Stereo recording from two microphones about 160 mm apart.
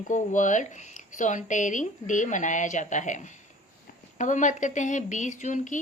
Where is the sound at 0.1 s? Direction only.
50° left (ahead or behind).